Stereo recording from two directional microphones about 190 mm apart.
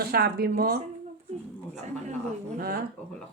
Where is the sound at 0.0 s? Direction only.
55° right (ahead or behind).